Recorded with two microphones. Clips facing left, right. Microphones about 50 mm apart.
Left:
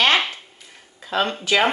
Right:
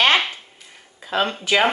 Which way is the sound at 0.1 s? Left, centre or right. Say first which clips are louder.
Right 1 dB; centre.